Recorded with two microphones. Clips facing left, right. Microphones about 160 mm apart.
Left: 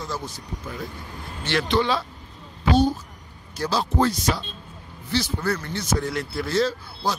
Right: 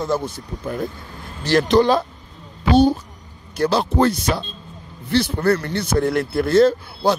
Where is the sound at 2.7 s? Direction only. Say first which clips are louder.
Right 6 dB; 70° right (ahead or behind).